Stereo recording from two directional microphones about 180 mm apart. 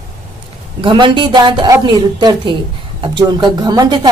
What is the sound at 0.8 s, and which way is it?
A woman's voice, 25° right (ahead or behind).